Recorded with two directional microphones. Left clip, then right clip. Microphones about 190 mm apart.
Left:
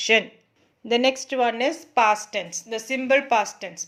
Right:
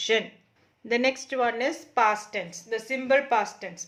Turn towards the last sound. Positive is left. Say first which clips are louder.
# left 3 dB
turn(degrees=40)  # may be behind; listen again after turning